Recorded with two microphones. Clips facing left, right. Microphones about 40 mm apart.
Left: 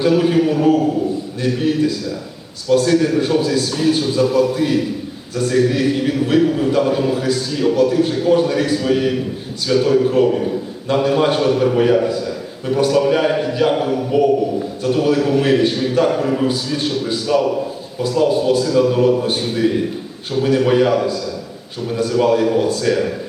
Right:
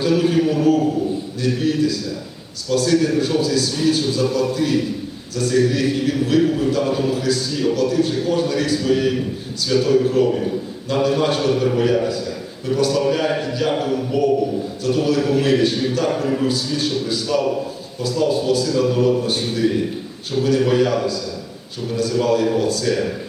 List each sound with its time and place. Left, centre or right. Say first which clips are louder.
0.0 s a man's voice: left 3 dB; centre
20.7 s speech: left 3 dB; centre